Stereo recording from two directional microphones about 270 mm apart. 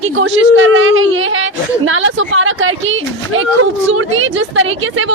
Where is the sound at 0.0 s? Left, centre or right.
Right.